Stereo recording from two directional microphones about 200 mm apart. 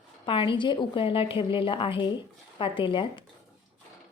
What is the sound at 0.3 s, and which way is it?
Speech, 25° left (ahead or behind).